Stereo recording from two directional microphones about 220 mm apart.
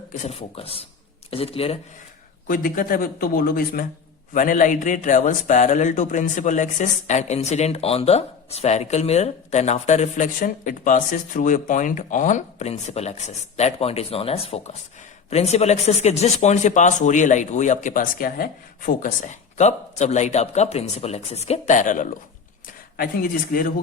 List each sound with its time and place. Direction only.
0.2 s speech: 30° left (ahead or behind)
2.5 s a man's voice: 40° left (ahead or behind)